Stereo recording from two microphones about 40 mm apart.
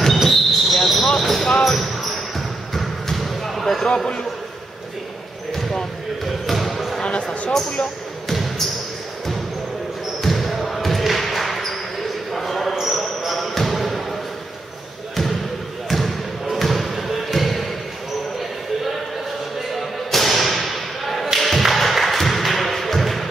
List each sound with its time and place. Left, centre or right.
0.0 s basketball bounce: centre
0.9 s basketball bounce: centre
3.8 s a sound: centre
5.5 s basketball bounce: centre
7.0 s a sound: left
8.3 s basketball bounce: centre
10.2 s basketball bounce: centre
16.5 s basketball bounce: centre
19.7 s thump: centre
21.4 s a sound: centre